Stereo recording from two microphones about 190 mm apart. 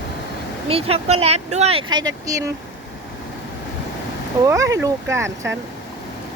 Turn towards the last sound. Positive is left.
turn(degrees=-15)  # may be behind; listen again after turning